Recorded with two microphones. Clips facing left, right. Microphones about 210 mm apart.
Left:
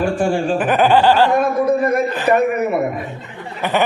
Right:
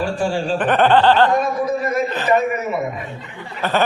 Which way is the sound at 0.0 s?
50° left (ahead or behind).